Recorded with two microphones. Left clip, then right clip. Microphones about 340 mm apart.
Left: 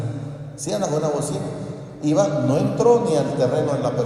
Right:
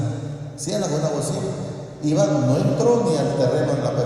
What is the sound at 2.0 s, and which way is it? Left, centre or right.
A man's voice, left.